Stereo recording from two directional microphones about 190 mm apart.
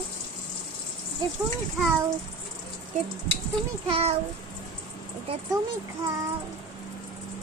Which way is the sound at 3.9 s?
30° right (ahead or behind).